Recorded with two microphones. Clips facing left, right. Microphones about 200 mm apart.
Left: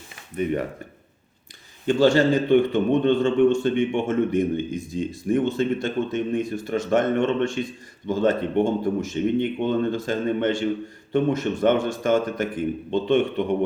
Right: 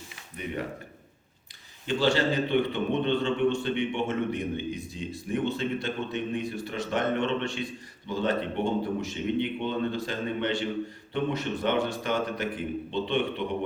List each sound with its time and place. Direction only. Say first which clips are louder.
1.9 s a man's voice: left 8 dB; 45° left (ahead or behind)